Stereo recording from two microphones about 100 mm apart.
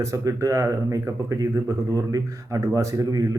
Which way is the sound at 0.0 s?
35° right (ahead or behind).